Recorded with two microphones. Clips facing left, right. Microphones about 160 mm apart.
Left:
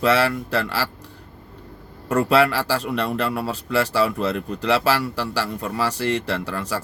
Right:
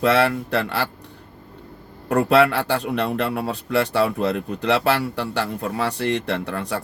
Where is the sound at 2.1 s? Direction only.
60° right (ahead or behind).